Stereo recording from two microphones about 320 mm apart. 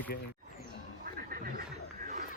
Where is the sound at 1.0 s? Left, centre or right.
Right.